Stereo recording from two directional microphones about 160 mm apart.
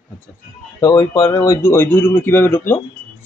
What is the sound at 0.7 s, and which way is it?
Speech, 25° left (ahead or behind).